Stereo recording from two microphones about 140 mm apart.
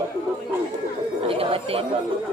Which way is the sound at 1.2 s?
45° right (ahead or behind).